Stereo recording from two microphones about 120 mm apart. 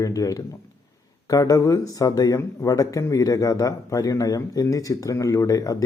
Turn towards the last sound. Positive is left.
turn(degrees=30)  # may be behind; listen again after turning